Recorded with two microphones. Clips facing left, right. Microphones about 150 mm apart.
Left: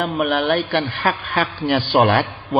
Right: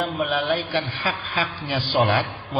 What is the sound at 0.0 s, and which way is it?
A man's voice, 65° left (ahead or behind).